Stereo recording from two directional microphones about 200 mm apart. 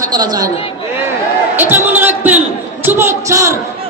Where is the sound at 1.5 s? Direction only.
10° right (ahead or behind).